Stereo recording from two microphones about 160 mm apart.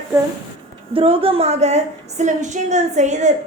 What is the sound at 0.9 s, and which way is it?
A woman's voice, 35° right (ahead or behind).